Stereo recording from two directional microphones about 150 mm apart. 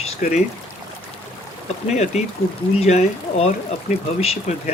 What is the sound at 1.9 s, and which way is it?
Speech, 45° left (ahead or behind).